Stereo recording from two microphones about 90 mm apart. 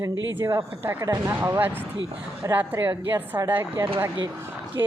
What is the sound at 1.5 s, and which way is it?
A woman's voice, 25° right (ahead or behind).